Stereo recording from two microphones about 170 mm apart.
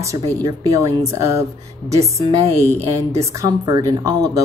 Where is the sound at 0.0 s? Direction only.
20° right (ahead or behind).